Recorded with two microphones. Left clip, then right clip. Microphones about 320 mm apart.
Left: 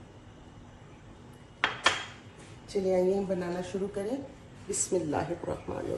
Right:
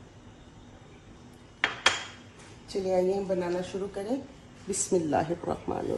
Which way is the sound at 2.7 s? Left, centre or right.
Centre.